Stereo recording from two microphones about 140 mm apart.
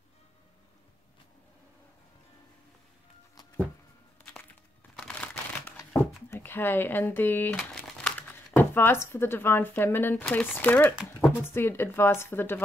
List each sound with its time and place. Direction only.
4.9 s a sound: 5° left (ahead or behind)
6.3 s speech: 15° left (ahead or behind)
7.5 s crumpling: 5° left (ahead or behind)
8.5 s speech: 15° left (ahead or behind)